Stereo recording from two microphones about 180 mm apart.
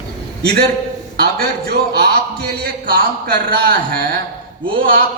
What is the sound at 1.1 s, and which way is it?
Speech, 60° right (ahead or behind).